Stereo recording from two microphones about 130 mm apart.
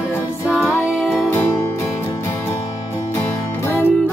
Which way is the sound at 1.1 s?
15° left (ahead or behind).